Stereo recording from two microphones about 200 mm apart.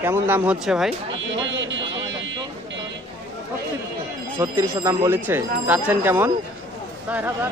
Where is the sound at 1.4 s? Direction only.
65° right (ahead or behind).